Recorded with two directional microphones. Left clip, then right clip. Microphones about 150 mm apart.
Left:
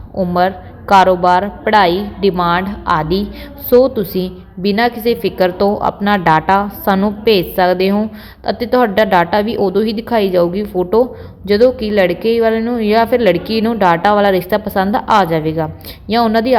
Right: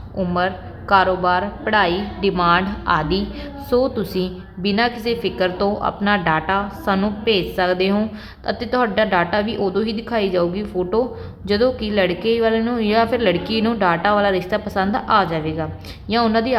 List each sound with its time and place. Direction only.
0.3 s a woman's voice: 25° left (ahead or behind)